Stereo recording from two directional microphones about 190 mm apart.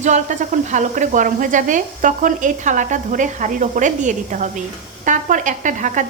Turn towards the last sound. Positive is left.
turn(degrees=-40)  # may be behind; listen again after turning